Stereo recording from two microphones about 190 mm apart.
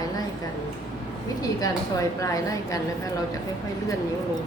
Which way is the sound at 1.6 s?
15° left (ahead or behind).